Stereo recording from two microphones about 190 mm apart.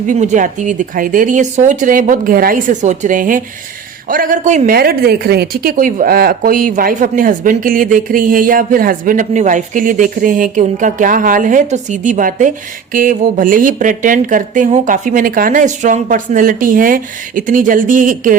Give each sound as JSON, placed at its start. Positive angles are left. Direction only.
{"t": 0.1, "sound": "speech", "side_deg": -40}